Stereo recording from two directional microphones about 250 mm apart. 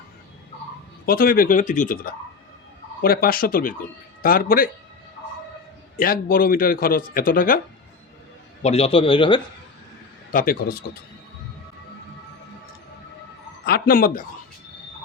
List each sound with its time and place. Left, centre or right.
1.0 s a man's voice: left
6.0 s a man's voice: left
8.6 s a man's voice: left
10.3 s a man's voice: left
13.7 s a man's voice: left